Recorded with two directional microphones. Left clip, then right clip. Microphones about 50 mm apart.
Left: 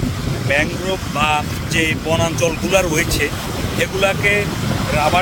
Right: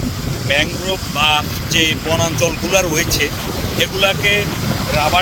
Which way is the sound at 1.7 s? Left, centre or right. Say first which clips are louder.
Right 3 dB; left.